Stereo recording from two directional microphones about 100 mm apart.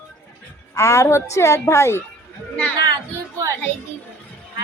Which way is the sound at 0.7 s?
30° left (ahead or behind).